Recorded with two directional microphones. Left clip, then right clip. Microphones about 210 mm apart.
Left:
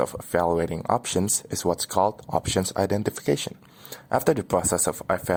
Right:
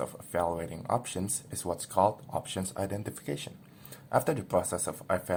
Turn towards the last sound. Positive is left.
turn(degrees=50)  # may be behind; listen again after turning